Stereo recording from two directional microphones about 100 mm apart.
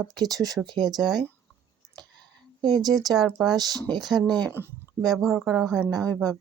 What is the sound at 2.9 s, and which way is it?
Speech, centre (ahead or behind).